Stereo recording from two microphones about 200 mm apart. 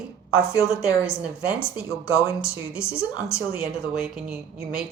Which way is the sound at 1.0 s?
5° right (ahead or behind).